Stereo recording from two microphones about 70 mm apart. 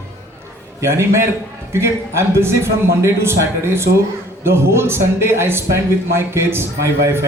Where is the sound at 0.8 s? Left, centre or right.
Right.